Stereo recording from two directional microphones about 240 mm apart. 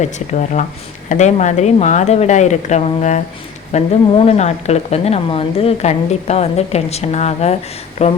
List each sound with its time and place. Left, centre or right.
0.0 s a woman's voice: left